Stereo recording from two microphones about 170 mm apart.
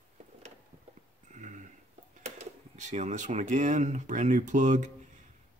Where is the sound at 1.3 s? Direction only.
45° right (ahead or behind).